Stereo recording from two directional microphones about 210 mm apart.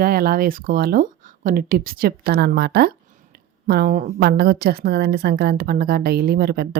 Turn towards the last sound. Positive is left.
turn(degrees=-45)  # may be behind; listen again after turning